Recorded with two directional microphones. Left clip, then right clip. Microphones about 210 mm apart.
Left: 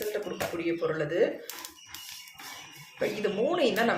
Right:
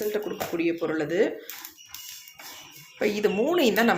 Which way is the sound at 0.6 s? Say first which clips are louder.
Right 3 dB; 40° right (ahead or behind).